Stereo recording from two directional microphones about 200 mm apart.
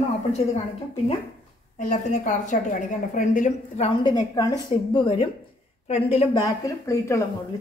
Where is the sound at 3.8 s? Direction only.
20° left (ahead or behind).